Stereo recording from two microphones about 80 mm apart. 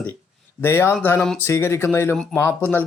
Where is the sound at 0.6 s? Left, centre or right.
Left.